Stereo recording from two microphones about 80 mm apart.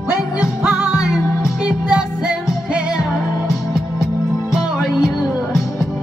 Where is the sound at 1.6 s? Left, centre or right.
Centre.